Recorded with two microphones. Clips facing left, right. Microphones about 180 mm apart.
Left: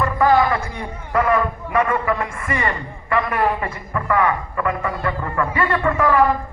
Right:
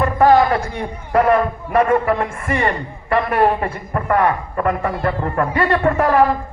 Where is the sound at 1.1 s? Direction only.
40° right (ahead or behind).